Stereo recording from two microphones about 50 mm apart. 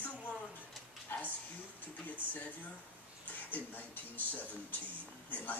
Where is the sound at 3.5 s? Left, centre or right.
Left.